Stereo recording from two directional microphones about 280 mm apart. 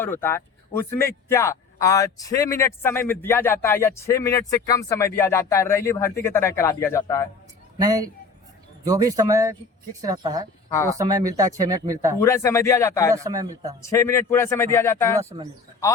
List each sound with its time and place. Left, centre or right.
0.0 s speech: centre
7.8 s speech: centre
12.2 s speech: centre
13.1 s speech: centre
13.9 s speech: centre
15.2 s speech: centre